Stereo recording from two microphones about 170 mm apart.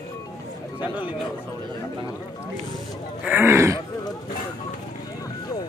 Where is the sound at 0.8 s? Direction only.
10° right (ahead or behind).